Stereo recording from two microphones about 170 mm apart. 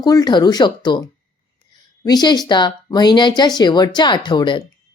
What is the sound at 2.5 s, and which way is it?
A woman's voice, 25° left (ahead or behind).